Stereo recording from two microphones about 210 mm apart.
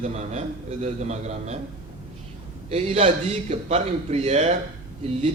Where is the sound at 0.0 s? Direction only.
30° right (ahead or behind).